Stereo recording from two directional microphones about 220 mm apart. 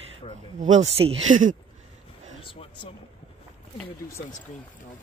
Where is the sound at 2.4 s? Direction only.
25° left (ahead or behind).